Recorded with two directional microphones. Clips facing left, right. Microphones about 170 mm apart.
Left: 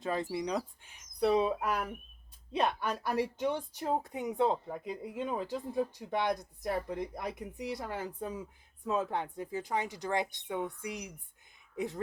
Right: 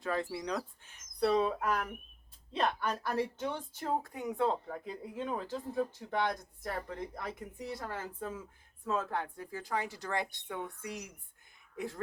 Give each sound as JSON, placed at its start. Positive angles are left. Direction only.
{"t": 0.0, "sound": "a woman's voice", "side_deg": 20}